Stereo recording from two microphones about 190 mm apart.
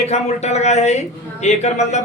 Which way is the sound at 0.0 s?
35° left (ahead or behind).